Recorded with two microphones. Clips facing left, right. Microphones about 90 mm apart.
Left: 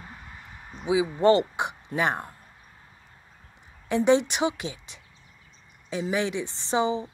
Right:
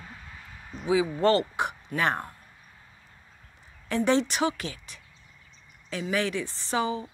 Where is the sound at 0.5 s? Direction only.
20° left (ahead or behind).